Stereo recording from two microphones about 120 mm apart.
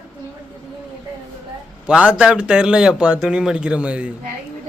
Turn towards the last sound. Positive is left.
turn(degrees=-10)  # may be behind; listen again after turning